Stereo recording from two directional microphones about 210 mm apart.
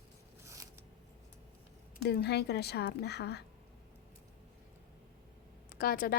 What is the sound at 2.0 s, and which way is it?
A woman's voice, 50° left (ahead or behind).